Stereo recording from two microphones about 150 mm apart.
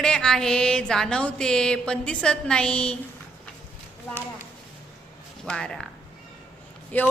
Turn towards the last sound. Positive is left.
turn(degrees=10)  # may be behind; listen again after turning